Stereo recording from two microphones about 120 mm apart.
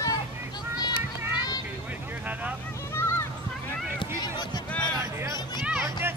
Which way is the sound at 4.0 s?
35° left (ahead or behind).